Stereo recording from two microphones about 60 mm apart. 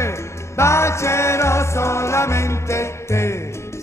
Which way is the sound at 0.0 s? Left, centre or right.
Left.